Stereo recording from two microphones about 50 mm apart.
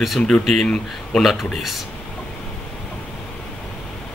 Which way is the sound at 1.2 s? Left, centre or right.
Centre.